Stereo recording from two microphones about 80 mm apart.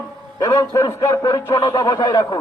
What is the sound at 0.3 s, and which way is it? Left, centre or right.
A man's voice, left.